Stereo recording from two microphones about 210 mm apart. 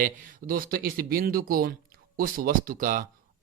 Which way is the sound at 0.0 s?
40° right (ahead or behind).